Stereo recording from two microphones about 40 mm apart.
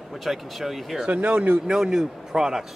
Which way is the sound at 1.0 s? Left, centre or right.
Right.